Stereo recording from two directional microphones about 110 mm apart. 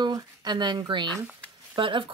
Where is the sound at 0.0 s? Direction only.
40° right (ahead or behind).